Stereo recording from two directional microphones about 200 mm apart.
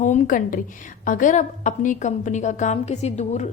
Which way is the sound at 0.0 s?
40° left (ahead or behind).